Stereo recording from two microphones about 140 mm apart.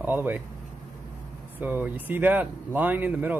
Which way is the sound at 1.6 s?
15° right (ahead or behind).